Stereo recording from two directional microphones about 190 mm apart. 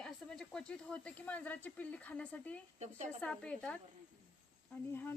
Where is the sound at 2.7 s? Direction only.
35° right (ahead or behind).